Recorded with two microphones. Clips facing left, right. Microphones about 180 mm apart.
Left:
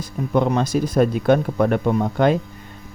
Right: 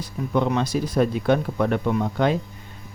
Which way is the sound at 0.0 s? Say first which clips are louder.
Left 3 dB; 45° left (ahead or behind).